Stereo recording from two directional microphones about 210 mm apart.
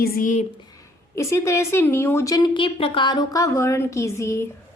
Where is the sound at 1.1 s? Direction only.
15° left (ahead or behind).